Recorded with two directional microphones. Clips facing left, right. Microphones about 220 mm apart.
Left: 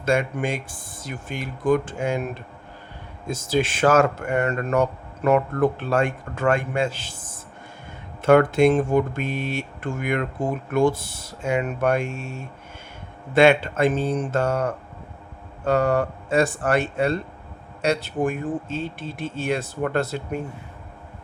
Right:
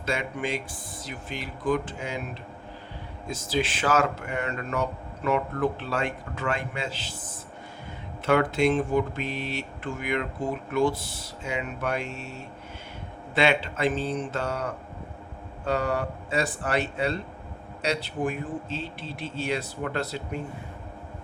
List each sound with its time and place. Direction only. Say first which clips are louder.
0.0 s speech: left 7 dB; 50° left (ahead or behind)
8.2 s speech: left 7 dB; 50° left (ahead or behind)